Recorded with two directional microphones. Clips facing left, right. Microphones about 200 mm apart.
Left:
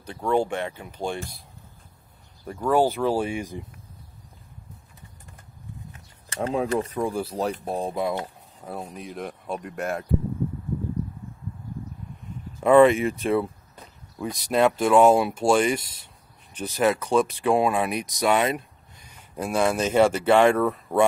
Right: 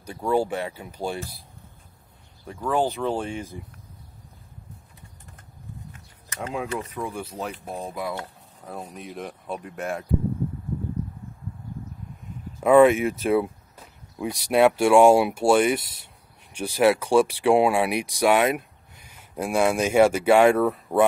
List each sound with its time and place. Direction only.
0.0 s speech: 10° right (ahead or behind)
2.4 s speech: 5° left (ahead or behind)
6.2 s speech: 30° left (ahead or behind)
8.6 s speech: centre (ahead or behind)
12.6 s speech: 5° right (ahead or behind)